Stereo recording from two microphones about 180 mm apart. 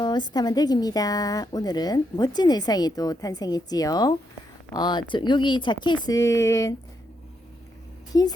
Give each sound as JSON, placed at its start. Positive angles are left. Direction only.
{"t": 0.0, "sound": "a woman's voice", "side_deg": 25}
{"t": 8.1, "sound": "a woman's voice", "side_deg": 20}